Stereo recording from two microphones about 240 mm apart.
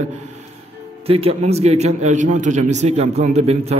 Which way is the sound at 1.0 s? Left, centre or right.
Right.